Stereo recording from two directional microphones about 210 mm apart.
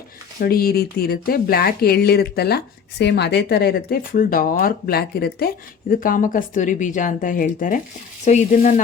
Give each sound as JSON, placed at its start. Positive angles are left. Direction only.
{"t": 0.3, "sound": "speech", "side_deg": 45}